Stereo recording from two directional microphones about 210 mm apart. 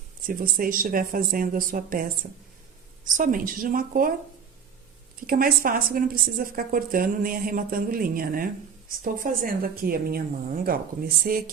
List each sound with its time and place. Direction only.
0.3 s speech: 40° right (ahead or behind)
5.2 s a woman's voice: 45° right (ahead or behind)